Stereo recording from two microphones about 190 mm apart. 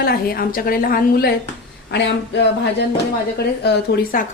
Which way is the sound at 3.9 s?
65° left (ahead or behind).